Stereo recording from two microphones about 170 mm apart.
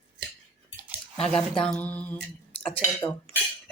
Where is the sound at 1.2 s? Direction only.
5° left (ahead or behind).